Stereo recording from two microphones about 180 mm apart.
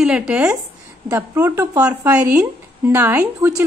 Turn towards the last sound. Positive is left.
turn(degrees=-10)  # may be behind; listen again after turning